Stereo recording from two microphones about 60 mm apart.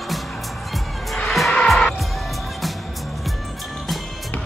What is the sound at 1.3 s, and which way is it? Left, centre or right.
Music, centre.